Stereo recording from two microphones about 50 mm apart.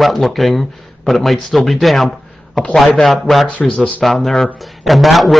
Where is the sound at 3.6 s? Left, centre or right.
Centre.